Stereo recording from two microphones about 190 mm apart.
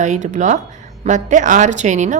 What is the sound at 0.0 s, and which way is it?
A woman's voice, 40° right (ahead or behind).